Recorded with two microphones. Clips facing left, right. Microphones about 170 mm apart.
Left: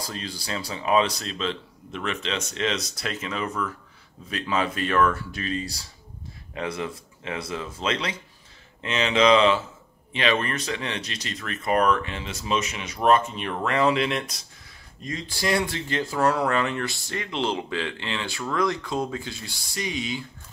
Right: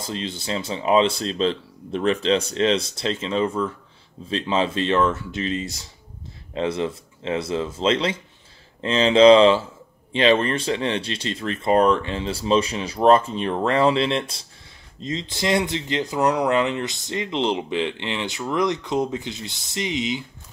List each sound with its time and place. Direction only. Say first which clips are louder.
0.0 s speech: right 5 dB; 25° right (ahead or behind)